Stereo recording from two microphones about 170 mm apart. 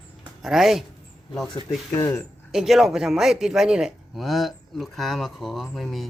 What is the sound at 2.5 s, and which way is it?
Speech, centre (ahead or behind).